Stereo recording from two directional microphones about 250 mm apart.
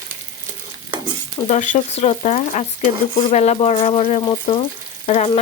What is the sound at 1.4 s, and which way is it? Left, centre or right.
Speech, left.